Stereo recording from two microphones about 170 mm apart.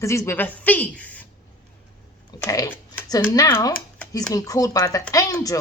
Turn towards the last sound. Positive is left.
turn(degrees=20)  # may be behind; listen again after turning